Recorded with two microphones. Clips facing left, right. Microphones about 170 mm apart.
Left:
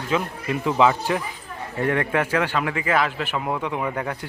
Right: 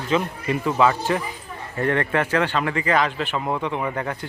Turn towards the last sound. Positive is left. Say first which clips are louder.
# even
turn(degrees=0)  # may be behind; listen again after turning